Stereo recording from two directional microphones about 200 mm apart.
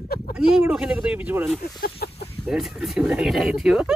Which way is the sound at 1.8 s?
50° left (ahead or behind).